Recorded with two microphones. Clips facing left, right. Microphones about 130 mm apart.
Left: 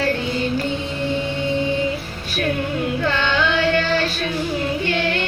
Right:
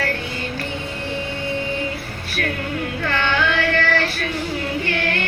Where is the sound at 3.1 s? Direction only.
20° left (ahead or behind).